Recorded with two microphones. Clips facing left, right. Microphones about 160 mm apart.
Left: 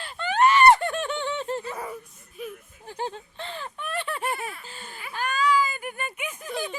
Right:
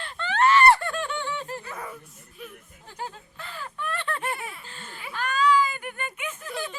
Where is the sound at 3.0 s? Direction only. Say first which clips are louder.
Left 5 dB; 25° left (ahead or behind).